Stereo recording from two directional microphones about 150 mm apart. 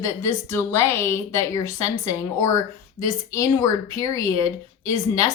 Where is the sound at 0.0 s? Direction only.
20° left (ahead or behind).